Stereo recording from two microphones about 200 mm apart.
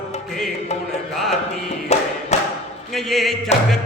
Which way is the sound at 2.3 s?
35° left (ahead or behind).